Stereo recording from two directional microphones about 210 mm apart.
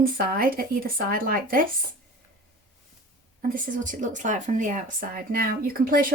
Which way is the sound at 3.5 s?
40° right (ahead or behind).